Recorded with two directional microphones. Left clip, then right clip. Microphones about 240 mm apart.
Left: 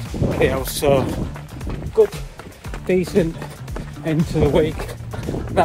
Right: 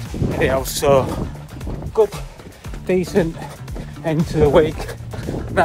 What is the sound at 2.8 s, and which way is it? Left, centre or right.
Speech, centre.